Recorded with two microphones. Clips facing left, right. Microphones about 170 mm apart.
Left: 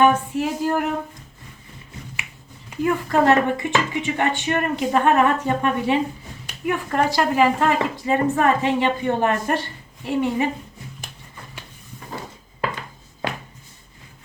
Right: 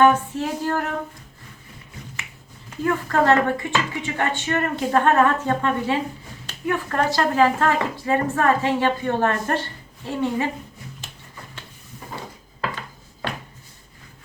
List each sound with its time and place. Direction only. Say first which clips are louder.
0.0 s speech: even; 15° left (ahead or behind)
2.6 s speech: left 2 dB; 15° left (ahead or behind)
13.2 s a sound: left 2 dB; 10° left (ahead or behind)